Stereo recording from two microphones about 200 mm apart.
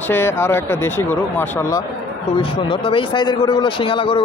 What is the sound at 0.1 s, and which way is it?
Speech, 10° left (ahead or behind).